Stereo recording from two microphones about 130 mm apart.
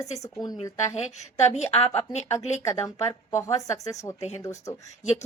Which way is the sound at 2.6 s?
25° left (ahead or behind).